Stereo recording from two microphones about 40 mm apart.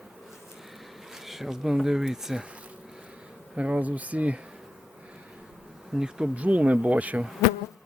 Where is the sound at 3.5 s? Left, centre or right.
Right.